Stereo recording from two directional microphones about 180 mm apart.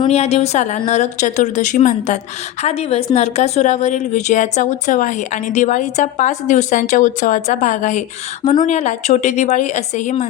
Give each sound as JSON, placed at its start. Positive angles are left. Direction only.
{"t": 0.1, "sound": "a woman's voice", "side_deg": 35}